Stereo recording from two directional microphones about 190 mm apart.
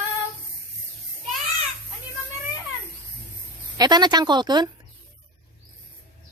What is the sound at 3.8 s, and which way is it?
Speech, 20° right (ahead or behind).